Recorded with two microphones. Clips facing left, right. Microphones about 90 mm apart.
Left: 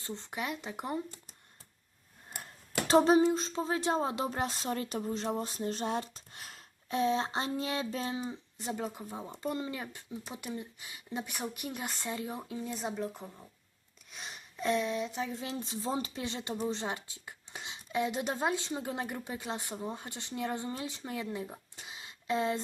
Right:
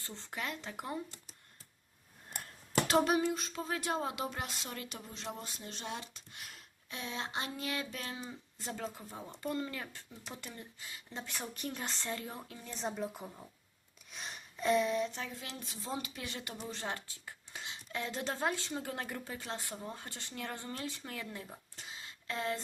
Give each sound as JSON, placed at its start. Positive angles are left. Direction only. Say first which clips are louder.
{"t": 0.0, "sound": "speech", "louder": "left 4 dB", "side_deg": 20}
{"t": 2.8, "sound": "a sound", "louder": "left 7 dB", "side_deg": 30}
{"t": 8.3, "sound": "speech", "louder": "left 5 dB", "side_deg": 20}
{"t": 15.1, "sound": "speech", "louder": "left 7 dB", "side_deg": 20}